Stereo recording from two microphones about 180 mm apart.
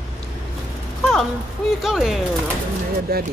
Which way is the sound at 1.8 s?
Centre (ahead or behind).